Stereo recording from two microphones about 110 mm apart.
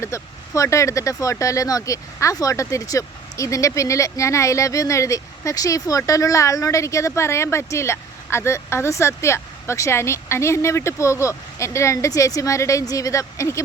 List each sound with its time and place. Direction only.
0.0 s speech: 30° left (ahead or behind)